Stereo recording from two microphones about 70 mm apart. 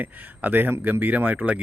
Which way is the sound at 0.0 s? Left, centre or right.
Right.